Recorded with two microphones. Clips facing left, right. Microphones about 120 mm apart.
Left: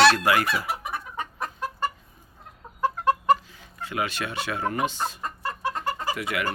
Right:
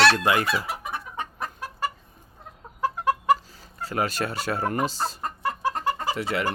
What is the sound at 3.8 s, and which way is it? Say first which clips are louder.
Speech: right 3 dB; 40° right (ahead or behind).